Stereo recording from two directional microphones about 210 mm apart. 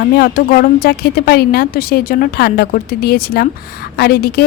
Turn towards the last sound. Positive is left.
turn(degrees=50)  # may be behind; listen again after turning